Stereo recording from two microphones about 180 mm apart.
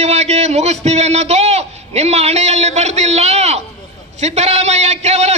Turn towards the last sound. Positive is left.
turn(degrees=-35)  # may be behind; listen again after turning